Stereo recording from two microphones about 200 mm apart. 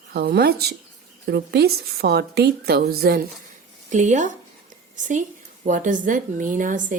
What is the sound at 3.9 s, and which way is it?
A woman's voice, 35° right (ahead or behind).